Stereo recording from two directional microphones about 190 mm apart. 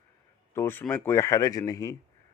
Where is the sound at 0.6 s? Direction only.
10° left (ahead or behind).